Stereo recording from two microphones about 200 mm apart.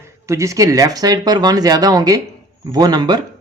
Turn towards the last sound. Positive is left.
turn(degrees=-20)  # may be behind; listen again after turning